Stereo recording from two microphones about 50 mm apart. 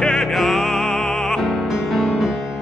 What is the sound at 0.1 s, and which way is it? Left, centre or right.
Music, centre.